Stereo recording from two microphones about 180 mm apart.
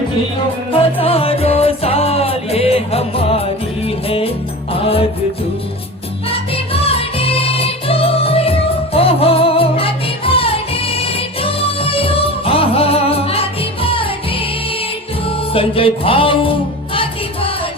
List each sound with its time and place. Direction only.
0.7 s music: 30° left (ahead or behind)
6.2 s music: 30° left (ahead or behind)